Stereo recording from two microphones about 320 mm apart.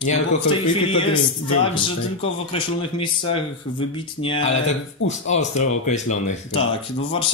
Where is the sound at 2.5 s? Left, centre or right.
Centre.